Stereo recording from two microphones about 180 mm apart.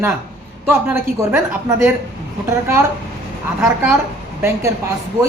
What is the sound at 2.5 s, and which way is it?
Speech, 15° right (ahead or behind).